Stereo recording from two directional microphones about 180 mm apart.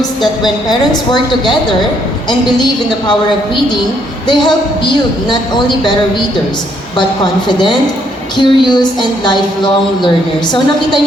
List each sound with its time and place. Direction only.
0.7 s a woman's voice: 25° left (ahead or behind)
4.4 s a woman's voice: 25° left (ahead or behind)
7.4 s a woman's voice: 25° left (ahead or behind)